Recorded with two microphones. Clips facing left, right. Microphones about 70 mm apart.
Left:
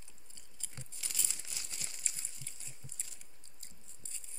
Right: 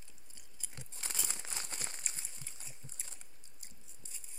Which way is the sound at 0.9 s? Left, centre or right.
Right.